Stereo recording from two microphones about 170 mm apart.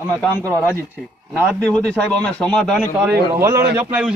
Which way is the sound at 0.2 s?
10° left (ahead or behind).